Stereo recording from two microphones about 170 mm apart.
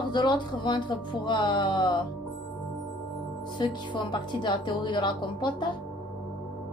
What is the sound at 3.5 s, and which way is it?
A woman's voice, 25° left (ahead or behind).